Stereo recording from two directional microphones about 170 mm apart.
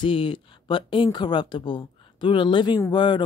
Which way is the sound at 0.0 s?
30° left (ahead or behind).